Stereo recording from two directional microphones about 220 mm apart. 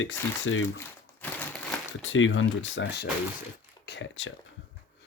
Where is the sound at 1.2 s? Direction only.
5° left (ahead or behind).